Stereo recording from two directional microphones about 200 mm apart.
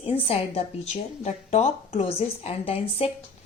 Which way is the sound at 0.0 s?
30° left (ahead or behind).